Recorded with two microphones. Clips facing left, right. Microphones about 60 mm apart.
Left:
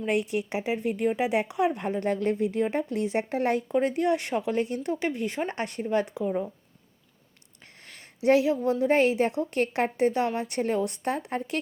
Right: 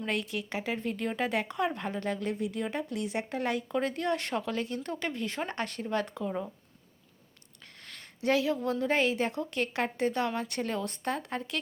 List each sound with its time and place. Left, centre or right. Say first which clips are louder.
0.0 s speech: left 6 dB; left
2.0 s speech: left 7 dB; left
3.8 s speech: left 6 dB; left
7.9 s a sound: left 5 dB; left
8.3 s speech: left 6 dB; left
10.1 s speech: left 4 dB; centre